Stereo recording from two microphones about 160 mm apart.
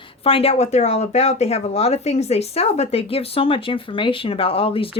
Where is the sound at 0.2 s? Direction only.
35° left (ahead or behind).